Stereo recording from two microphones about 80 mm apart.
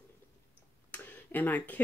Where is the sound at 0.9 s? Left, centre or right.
Left.